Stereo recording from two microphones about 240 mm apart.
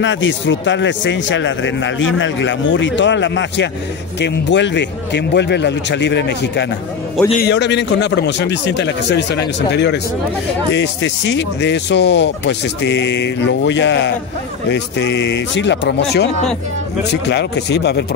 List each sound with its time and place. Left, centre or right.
0.0 s speech: left